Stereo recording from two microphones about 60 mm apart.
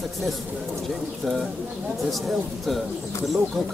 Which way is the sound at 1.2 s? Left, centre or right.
Centre.